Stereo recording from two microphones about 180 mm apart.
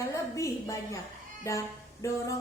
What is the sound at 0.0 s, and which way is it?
A woman's voice, 15° left (ahead or behind).